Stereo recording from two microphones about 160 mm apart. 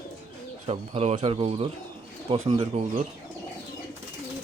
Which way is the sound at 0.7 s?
40° right (ahead or behind).